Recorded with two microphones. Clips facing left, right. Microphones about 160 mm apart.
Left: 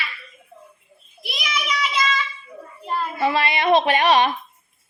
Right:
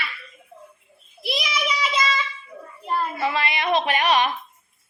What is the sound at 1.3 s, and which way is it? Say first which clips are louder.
Child singing: right 2 dB; 30° right (ahead or behind).